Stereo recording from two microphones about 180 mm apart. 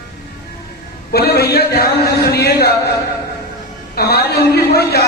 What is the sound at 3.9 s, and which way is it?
A woman's voice, 60° left (ahead or behind).